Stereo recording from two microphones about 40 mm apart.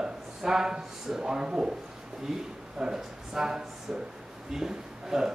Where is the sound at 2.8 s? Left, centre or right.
Centre.